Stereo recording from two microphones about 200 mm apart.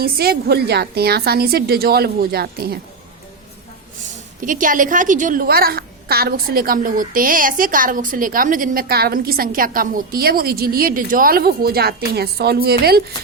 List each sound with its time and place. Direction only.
0.0 s a woman's voice: 50° right (ahead or behind)
4.4 s a woman's voice: 40° right (ahead or behind)